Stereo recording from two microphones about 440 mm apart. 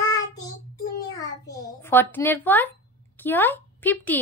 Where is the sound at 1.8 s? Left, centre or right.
Centre.